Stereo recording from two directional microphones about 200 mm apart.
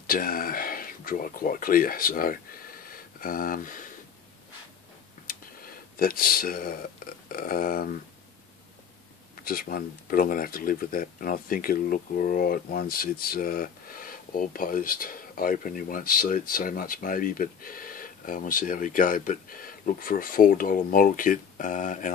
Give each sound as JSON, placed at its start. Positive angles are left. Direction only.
{"t": 0.0, "sound": "speech", "side_deg": 45}
{"t": 5.2, "sound": "a sound", "side_deg": 45}
{"t": 7.2, "sound": "speech", "side_deg": 45}
{"t": 9.4, "sound": "speech", "side_deg": 50}